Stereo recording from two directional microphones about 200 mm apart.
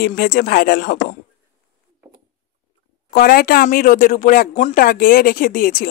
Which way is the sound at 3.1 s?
45° left (ahead or behind).